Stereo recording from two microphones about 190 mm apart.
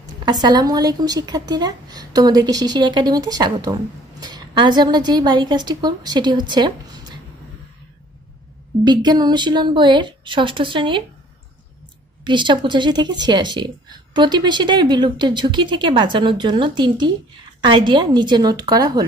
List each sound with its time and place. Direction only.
0.2 s a woman's voice: 20° right (ahead or behind)
8.8 s a woman's voice: 20° right (ahead or behind)
12.3 s a woman's voice: 25° right (ahead or behind)